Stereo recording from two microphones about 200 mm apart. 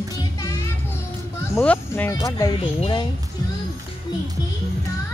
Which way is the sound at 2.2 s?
15° left (ahead or behind).